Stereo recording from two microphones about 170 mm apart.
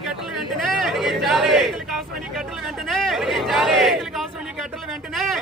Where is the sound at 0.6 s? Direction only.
Centre (ahead or behind).